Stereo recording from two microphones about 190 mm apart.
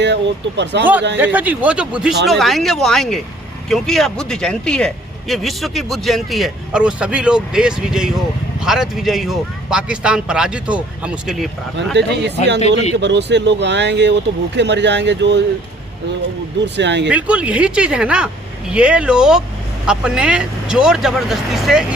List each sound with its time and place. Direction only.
0.0 s speech: 65° right (ahead or behind)
1.2 s speech: 10° right (ahead or behind)
11.9 s speech: 65° right (ahead or behind)
16.7 s speech: 70° right (ahead or behind)
17.1 s speech: 5° right (ahead or behind)